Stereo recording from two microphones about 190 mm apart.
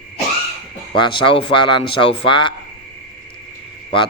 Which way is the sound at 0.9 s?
25° left (ahead or behind).